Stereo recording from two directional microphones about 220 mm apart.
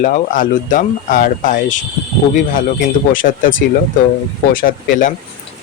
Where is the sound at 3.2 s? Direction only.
35° left (ahead or behind).